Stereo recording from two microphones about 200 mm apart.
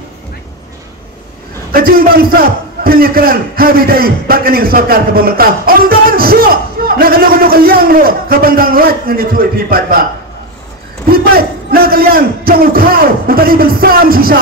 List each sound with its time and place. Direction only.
1.7 s a man's voice: 45° right (ahead or behind)
11.1 s a man's voice: 50° right (ahead or behind)